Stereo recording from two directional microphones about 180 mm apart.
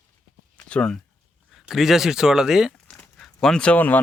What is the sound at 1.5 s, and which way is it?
Speech, centre (ahead or behind).